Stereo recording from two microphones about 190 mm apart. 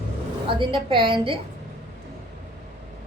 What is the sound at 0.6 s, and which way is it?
Speech, 25° right (ahead or behind).